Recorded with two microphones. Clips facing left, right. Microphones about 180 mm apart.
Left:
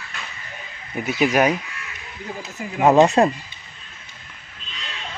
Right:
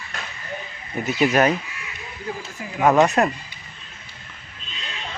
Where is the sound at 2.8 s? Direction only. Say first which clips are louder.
Left 3 dB; 25° left (ahead or behind).